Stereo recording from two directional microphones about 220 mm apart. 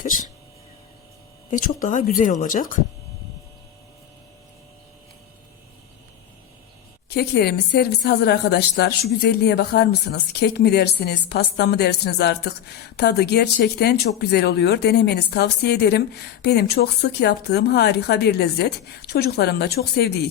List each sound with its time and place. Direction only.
1.5 s speech: 35° left (ahead or behind)
7.1 s speech: 45° left (ahead or behind)